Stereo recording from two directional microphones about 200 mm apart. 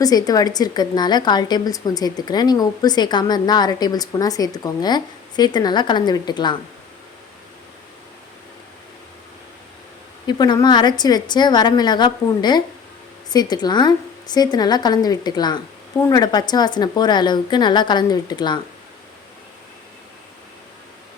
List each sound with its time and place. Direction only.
0.0 s a woman's voice: 20° left (ahead or behind)
10.2 s a woman's voice: 20° left (ahead or behind)